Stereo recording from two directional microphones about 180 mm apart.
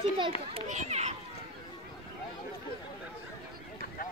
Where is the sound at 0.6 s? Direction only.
40° right (ahead or behind).